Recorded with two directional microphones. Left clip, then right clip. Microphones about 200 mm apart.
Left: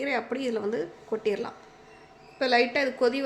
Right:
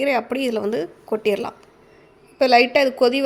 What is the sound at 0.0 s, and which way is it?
A woman's voice, 40° right (ahead or behind).